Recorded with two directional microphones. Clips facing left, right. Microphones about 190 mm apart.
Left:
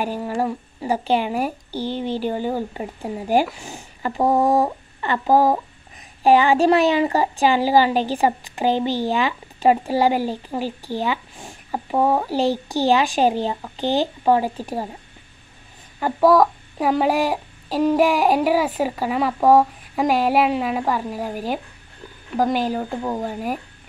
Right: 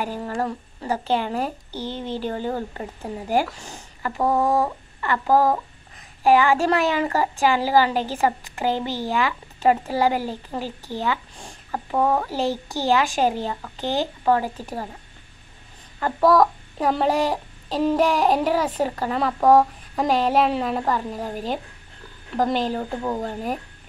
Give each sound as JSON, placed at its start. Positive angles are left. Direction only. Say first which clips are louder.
{"t": 0.0, "sound": "speech", "louder": "left 3 dB", "side_deg": 15}
{"t": 16.0, "sound": "speech", "louder": "left 2 dB", "side_deg": 5}